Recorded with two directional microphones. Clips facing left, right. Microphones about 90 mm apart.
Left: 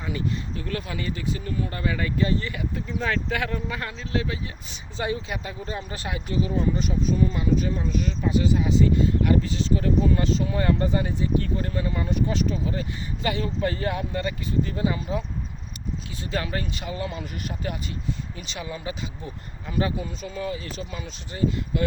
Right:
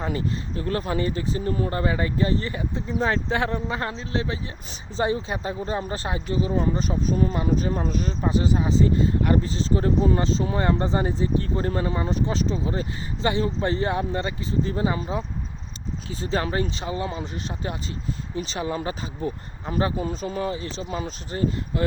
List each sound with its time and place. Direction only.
0.0 s speech: 35° right (ahead or behind)